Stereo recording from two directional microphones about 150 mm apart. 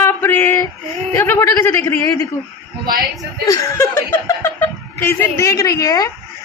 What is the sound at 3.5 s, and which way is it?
A woman's voice, 20° left (ahead or behind).